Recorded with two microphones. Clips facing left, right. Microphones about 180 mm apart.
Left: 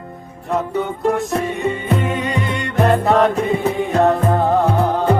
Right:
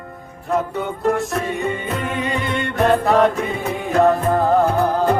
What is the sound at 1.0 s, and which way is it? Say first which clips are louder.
Music: even; centre (ahead or behind).